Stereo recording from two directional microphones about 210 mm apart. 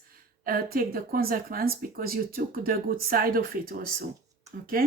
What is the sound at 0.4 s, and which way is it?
Speech, 45° right (ahead or behind).